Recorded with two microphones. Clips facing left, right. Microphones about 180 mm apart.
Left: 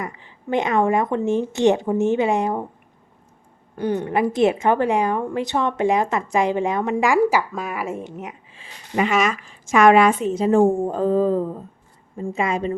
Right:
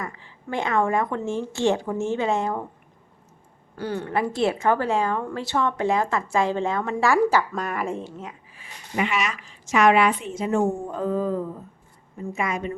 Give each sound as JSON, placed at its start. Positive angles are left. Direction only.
{"t": 0.0, "sound": "a woman's voice", "side_deg": 20}
{"t": 3.8, "sound": "speech", "side_deg": 15}
{"t": 8.0, "sound": "speech", "side_deg": 20}
{"t": 9.0, "sound": "a woman's voice", "side_deg": 45}